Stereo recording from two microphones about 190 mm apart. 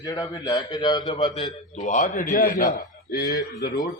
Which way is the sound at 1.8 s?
40° left (ahead or behind).